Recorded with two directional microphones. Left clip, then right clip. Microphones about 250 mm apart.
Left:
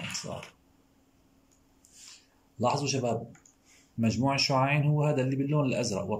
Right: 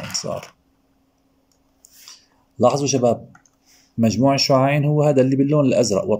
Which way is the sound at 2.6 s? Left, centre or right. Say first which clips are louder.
Right 12 dB; right.